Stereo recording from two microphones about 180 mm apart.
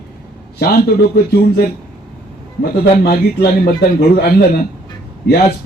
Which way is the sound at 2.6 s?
55° left (ahead or behind).